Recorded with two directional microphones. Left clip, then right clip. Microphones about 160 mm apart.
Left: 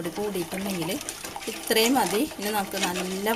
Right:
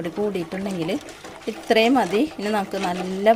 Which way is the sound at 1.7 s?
45° right (ahead or behind).